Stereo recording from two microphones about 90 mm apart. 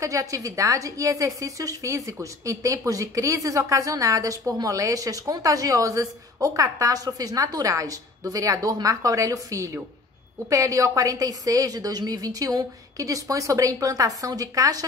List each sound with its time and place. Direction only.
0.0 s a woman's voice: 35° right (ahead or behind)